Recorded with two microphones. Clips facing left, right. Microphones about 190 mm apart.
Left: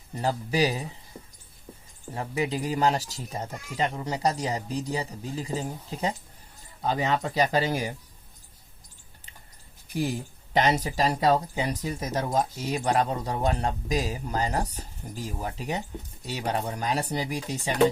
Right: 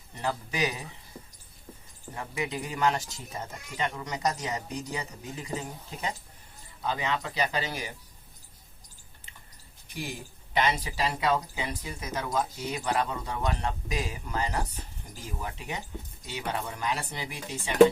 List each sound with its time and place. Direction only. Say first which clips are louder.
0.1 s speech: left 5 dB; 35° left (ahead or behind)
2.1 s speech: left 5 dB; 30° left (ahead or behind)
10.5 s speech: left 4 dB; 40° left (ahead or behind)